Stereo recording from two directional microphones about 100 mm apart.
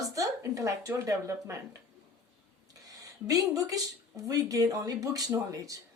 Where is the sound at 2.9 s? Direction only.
35° right (ahead or behind).